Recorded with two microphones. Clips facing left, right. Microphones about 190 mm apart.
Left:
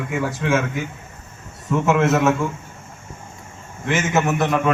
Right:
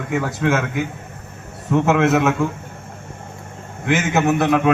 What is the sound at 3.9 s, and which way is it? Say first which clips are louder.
Speech: right 2 dB; 60° right (ahead or behind).